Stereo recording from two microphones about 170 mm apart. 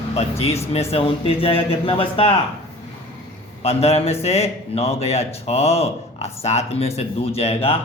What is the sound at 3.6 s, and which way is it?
Speech, 35° left (ahead or behind).